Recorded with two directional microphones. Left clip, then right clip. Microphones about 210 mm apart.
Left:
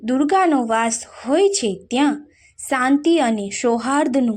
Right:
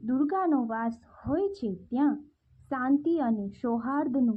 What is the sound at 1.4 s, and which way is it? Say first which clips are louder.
Speech: left 14 dB; 20° left (ahead or behind).